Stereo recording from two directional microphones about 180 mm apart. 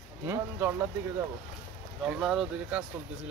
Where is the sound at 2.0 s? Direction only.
5° right (ahead or behind).